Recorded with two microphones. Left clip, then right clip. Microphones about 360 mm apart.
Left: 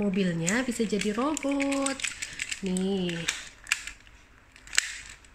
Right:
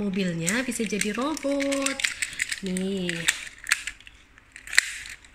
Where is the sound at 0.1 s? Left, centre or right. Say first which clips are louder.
Right 1 dB; centre.